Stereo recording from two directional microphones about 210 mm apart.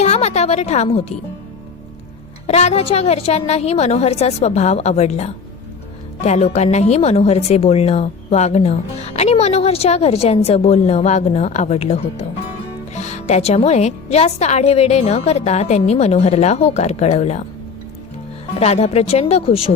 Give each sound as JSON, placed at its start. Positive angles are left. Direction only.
{"t": 0.0, "sound": "music", "side_deg": 30}
{"t": 2.5, "sound": "a woman's voice", "side_deg": 30}
{"t": 18.6, "sound": "speech", "side_deg": 30}